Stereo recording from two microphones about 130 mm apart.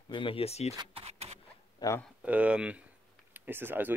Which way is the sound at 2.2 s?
10° right (ahead or behind).